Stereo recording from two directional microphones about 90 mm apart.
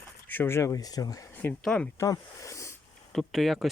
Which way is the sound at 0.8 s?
45° left (ahead or behind).